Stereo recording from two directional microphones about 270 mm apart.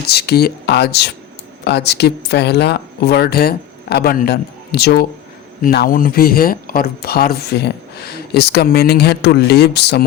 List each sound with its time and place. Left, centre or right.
0.1 s speech: left